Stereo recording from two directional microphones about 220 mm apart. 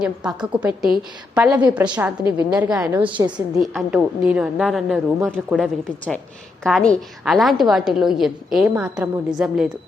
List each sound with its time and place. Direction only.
0.0 s a woman's voice: 5° right (ahead or behind)
3.0 s a woman's voice: 20° right (ahead or behind)
3.2 s a woman's voice: 5° right (ahead or behind)